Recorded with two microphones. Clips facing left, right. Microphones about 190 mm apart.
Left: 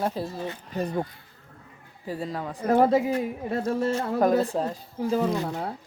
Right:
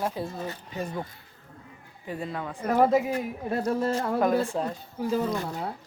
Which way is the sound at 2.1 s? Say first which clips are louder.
Left 2 dB; 35° left (ahead or behind).